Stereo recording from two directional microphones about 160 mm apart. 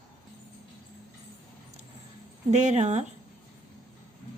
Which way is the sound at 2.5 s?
45° right (ahead or behind).